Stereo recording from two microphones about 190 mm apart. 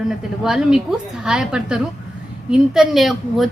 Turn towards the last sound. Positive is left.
turn(degrees=0)  # may be behind; listen again after turning